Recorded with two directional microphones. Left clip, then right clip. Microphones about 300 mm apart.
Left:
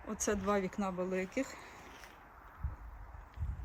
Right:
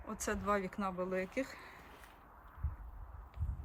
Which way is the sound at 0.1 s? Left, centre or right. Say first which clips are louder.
Left 2 dB; centre.